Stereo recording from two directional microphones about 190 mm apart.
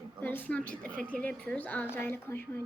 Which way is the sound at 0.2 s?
10° left (ahead or behind).